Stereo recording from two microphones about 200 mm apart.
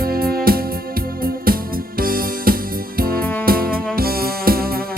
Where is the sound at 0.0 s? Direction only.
50° right (ahead or behind).